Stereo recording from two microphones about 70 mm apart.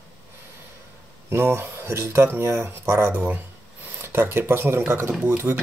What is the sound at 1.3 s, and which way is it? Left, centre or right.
Speech, right.